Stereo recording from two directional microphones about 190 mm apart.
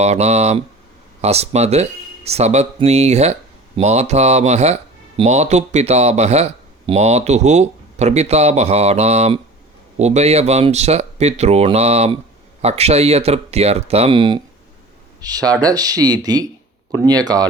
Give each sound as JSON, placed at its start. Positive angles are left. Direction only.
{"t": 0.0, "sound": "speech", "side_deg": -35}